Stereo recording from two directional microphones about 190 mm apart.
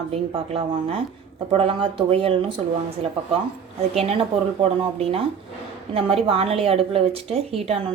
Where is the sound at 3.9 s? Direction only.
30° right (ahead or behind).